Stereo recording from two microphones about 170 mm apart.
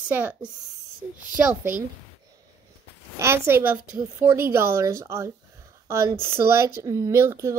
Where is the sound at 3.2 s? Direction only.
15° right (ahead or behind).